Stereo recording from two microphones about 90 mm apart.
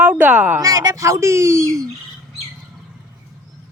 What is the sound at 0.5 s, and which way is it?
A woman's voice, 40° right (ahead or behind).